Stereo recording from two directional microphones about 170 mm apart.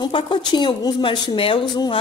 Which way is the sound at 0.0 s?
25° left (ahead or behind).